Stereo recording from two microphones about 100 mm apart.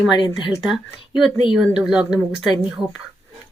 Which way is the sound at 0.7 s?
5° right (ahead or behind).